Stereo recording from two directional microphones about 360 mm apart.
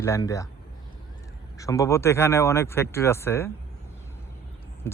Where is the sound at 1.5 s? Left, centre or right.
Centre.